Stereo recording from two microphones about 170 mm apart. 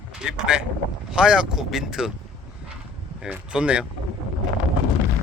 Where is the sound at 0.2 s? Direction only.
5° right (ahead or behind).